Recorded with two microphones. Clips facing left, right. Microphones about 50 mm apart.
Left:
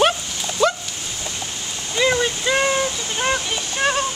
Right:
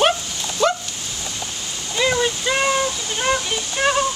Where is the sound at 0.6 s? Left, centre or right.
Centre.